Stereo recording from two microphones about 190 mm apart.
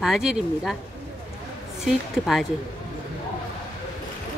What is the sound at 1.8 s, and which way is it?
Speech, centre (ahead or behind).